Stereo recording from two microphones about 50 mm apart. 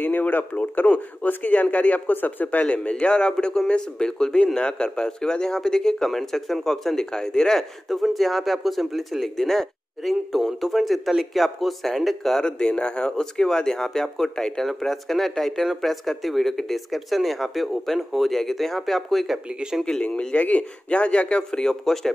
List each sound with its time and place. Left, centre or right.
0.0 s speech: left
2.6 s a man's voice: left; by 12.4 s centre
12.4 s speech: centre
20.0 s a man's voice: centre
21.5 s speech: centre